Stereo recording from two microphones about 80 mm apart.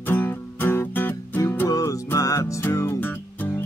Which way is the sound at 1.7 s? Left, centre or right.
Left.